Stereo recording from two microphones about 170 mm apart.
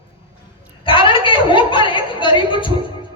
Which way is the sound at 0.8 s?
30° left (ahead or behind).